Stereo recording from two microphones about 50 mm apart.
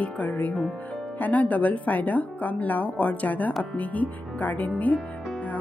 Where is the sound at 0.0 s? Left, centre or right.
Left.